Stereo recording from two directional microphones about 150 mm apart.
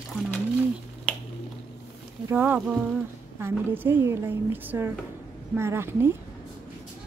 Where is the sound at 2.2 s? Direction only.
15° right (ahead or behind).